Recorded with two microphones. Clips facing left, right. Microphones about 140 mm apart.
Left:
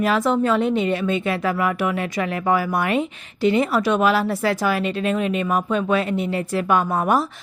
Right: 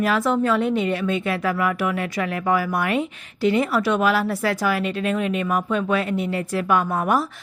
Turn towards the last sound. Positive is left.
turn(degrees=25)  # may be behind; listen again after turning